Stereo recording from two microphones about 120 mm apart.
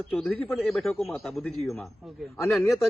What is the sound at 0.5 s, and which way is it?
Speech, centre (ahead or behind).